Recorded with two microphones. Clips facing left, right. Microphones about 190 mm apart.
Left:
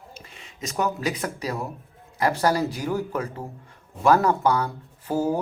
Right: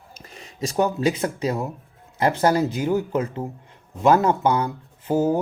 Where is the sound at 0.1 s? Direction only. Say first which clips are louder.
Right 2 dB; 40° right (ahead or behind).